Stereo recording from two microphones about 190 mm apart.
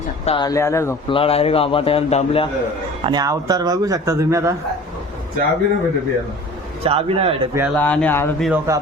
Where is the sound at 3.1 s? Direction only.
20° right (ahead or behind).